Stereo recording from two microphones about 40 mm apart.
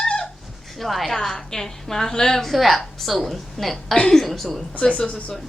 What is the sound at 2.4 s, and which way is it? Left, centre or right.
A woman's voice, centre.